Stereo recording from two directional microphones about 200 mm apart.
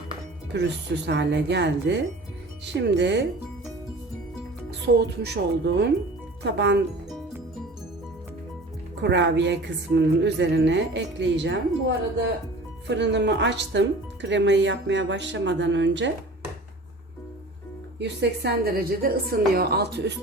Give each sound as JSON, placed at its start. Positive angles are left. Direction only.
{"t": 0.5, "sound": "a woman's voice", "side_deg": -55}
{"t": 4.9, "sound": "a woman's voice", "side_deg": -55}
{"t": 9.0, "sound": "a woman's voice", "side_deg": -60}
{"t": 18.0, "sound": "a woman's voice", "side_deg": -55}